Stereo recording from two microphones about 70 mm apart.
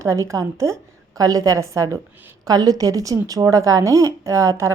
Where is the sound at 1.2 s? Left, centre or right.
Right.